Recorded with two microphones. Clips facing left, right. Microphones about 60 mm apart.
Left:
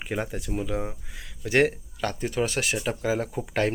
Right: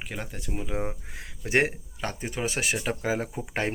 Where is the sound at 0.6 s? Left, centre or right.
Right.